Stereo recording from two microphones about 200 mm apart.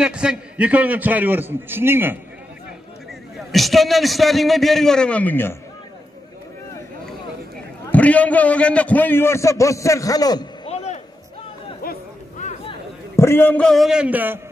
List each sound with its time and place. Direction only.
0.0 s a man's voice: 5° right (ahead or behind)
3.3 s a man's voice: centre (ahead or behind)
7.8 s a man's voice: 5° left (ahead or behind)
10.7 s a sound: 30° left (ahead or behind)
11.8 s chatter: 40° left (ahead or behind)
13.1 s a man's voice: 10° left (ahead or behind); by 14.4 s 10° right (ahead or behind)